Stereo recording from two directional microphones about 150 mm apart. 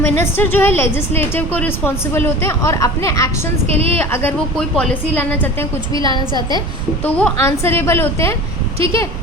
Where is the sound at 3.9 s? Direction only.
15° left (ahead or behind).